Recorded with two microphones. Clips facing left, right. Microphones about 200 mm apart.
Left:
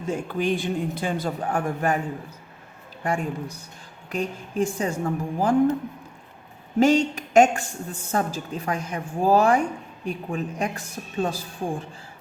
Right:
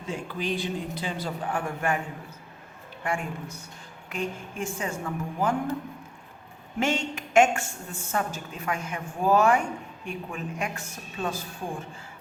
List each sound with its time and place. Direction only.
0.1 s speech: 50° left (ahead or behind)
3.0 s a woman's voice: 40° left (ahead or behind)
6.7 s a woman's voice: 35° left (ahead or behind)